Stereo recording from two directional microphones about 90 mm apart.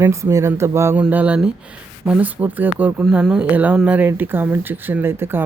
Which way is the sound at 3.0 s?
10° right (ahead or behind).